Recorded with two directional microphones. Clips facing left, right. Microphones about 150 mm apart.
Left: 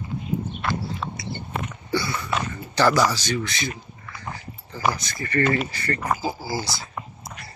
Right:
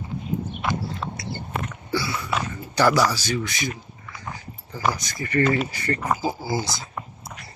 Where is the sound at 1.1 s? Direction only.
Centre (ahead or behind).